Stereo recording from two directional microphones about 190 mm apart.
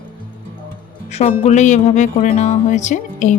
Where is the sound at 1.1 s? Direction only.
35° left (ahead or behind).